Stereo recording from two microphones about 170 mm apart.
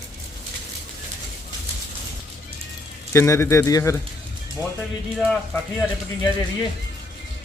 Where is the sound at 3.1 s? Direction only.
15° left (ahead or behind).